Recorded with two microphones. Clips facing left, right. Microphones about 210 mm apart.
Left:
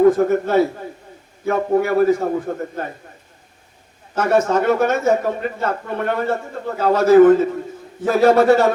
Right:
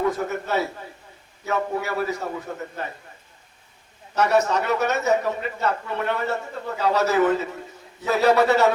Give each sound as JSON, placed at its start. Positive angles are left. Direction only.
{"t": 0.0, "sound": "a man's voice", "side_deg": 50}
{"t": 4.1, "sound": "a man's voice", "side_deg": 50}